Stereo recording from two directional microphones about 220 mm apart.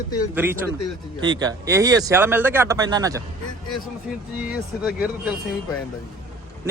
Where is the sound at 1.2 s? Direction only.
20° right (ahead or behind).